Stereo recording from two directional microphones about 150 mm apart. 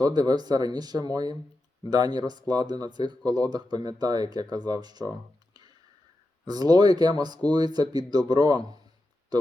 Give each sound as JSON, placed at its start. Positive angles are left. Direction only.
{"t": 0.0, "sound": "speech", "side_deg": -25}
{"t": 6.4, "sound": "speech", "side_deg": -25}